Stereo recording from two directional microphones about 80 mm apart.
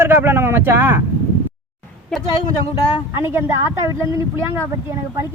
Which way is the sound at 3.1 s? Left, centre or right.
Right.